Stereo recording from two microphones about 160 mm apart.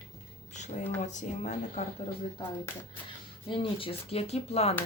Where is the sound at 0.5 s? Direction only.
45° left (ahead or behind).